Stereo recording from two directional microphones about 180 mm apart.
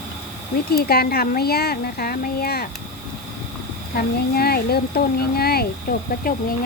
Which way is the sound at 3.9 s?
60° left (ahead or behind).